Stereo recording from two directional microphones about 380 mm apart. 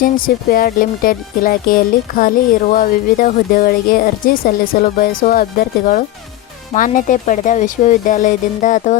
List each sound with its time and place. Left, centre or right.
0.0 s speech: left